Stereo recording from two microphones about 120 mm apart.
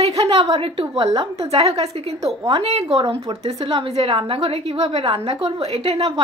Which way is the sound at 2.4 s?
50° right (ahead or behind).